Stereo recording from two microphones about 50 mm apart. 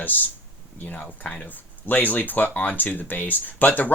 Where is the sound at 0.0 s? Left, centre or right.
Left.